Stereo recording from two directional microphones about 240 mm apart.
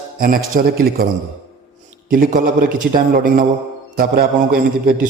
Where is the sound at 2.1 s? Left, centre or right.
Right.